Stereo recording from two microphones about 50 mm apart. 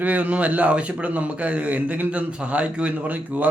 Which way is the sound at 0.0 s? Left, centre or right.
Right.